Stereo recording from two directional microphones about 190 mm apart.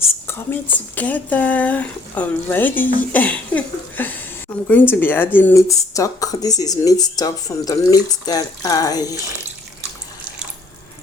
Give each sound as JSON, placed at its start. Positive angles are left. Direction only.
{"t": 0.3, "sound": "speech", "side_deg": 10}